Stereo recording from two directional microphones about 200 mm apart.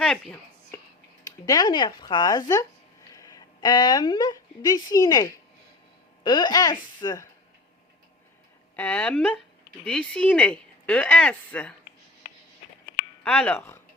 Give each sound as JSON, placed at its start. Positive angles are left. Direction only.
{"t": 0.0, "sound": "a sound", "side_deg": 5}
{"t": 1.2, "sound": "speech", "side_deg": 20}
{"t": 8.7, "sound": "speech", "side_deg": 10}
{"t": 13.2, "sound": "speech", "side_deg": 5}